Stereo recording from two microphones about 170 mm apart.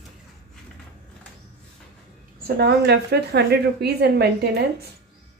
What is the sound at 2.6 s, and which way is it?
Speech, 75° right (ahead or behind).